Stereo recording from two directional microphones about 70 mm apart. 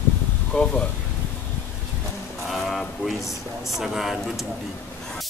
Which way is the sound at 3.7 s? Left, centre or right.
Centre.